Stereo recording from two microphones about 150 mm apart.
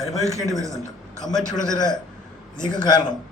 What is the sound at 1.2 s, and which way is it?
Speech, 5° left (ahead or behind).